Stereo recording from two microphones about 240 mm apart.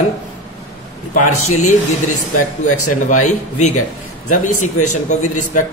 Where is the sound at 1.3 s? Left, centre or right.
Left.